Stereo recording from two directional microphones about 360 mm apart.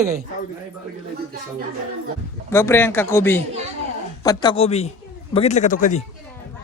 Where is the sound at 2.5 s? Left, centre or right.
Centre.